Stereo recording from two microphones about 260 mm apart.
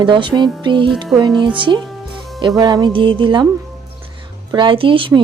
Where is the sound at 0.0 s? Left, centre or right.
Centre.